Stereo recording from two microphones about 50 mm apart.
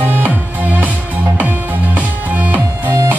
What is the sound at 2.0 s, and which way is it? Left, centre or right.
Music, right.